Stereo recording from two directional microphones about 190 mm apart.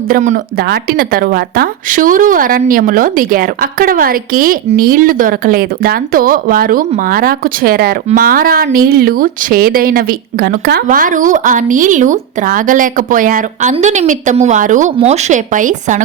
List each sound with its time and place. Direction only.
0.1 s speech: 40° right (ahead or behind)